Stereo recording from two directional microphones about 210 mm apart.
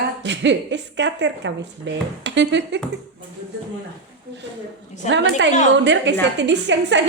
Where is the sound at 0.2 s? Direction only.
55° right (ahead or behind).